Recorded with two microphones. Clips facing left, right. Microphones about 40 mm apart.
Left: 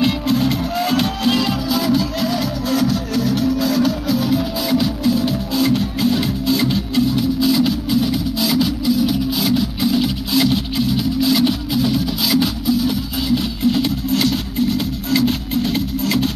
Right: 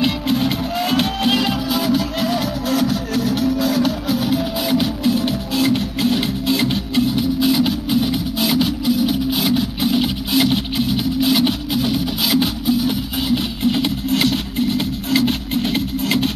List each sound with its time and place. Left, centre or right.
0.3 s music: centre